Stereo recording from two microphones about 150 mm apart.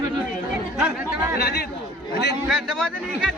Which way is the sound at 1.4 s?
90° left.